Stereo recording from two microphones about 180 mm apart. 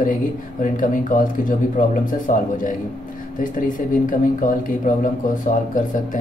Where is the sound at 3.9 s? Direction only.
50° left (ahead or behind).